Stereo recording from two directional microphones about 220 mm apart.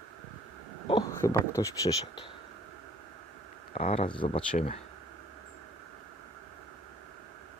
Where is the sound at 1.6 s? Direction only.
15° left (ahead or behind).